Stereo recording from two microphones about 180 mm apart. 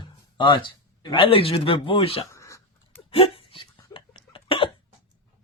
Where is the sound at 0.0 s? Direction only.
25° left (ahead or behind).